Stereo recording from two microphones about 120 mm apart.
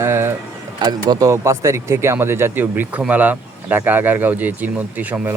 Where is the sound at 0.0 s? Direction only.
20° right (ahead or behind).